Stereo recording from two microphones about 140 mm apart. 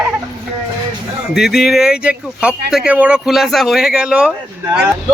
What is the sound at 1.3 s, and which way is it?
Speech, centre (ahead or behind).